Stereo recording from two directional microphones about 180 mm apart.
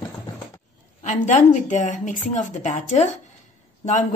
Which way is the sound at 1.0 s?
45° left (ahead or behind).